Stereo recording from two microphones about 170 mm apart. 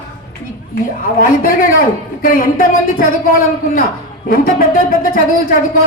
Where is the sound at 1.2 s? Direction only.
55° left (ahead or behind).